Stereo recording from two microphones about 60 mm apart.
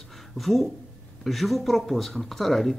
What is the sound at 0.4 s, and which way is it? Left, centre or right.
Speech, centre.